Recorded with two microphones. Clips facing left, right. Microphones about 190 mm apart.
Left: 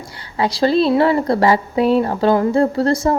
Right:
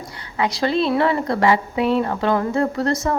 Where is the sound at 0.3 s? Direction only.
35° left (ahead or behind).